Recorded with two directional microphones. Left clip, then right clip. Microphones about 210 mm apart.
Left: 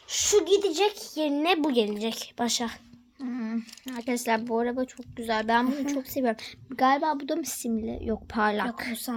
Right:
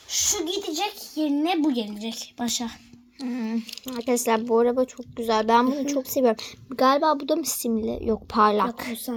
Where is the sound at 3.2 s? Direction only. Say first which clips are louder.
Right 4 dB; 5° right (ahead or behind).